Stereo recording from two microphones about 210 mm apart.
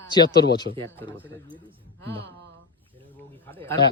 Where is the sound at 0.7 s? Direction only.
50° left (ahead or behind).